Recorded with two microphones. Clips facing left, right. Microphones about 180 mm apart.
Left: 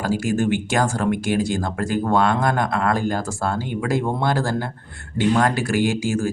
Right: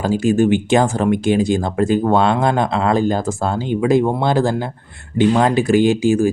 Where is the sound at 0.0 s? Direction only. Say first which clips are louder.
Right 6 dB; 20° right (ahead or behind).